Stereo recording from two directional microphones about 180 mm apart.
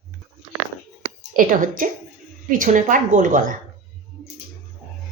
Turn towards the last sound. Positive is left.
turn(degrees=-45)  # may be behind; listen again after turning